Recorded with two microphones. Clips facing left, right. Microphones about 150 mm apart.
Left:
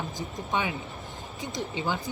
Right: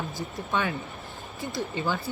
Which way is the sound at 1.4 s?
15° left (ahead or behind).